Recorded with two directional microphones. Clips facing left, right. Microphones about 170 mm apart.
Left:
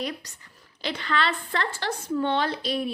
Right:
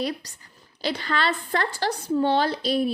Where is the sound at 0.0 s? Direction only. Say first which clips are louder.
Right 4 dB; 35° right (ahead or behind).